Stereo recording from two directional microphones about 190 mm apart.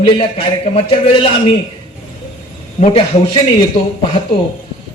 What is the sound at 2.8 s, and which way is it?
Speech, 30° left (ahead or behind).